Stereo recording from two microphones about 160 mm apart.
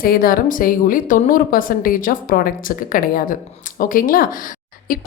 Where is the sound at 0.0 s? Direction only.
65° left (ahead or behind).